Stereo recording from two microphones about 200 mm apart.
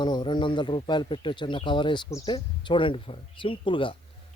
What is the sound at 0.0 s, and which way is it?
A man's voice, 20° left (ahead or behind).